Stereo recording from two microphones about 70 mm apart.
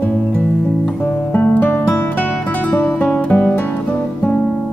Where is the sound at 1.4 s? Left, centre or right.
Left.